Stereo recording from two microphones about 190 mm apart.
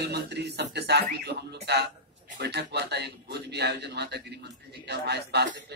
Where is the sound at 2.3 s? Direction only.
60° right (ahead or behind).